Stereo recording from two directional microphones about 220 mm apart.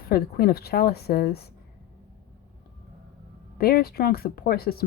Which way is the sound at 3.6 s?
45° left (ahead or behind).